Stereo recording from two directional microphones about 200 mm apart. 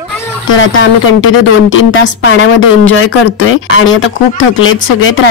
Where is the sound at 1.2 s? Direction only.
80° left.